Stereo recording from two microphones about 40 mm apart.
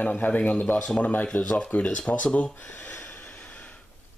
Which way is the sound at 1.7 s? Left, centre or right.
Left.